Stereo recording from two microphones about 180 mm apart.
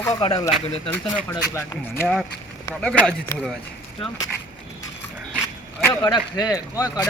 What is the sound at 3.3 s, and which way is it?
Speech, 15° left (ahead or behind).